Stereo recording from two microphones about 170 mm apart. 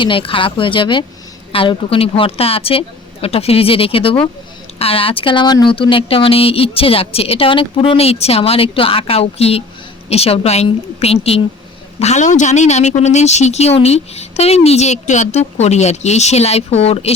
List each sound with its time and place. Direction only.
0.0 s speech: 30° left (ahead or behind)